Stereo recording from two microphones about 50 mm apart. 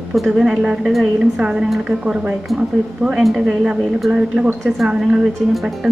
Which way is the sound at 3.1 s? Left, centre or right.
Centre.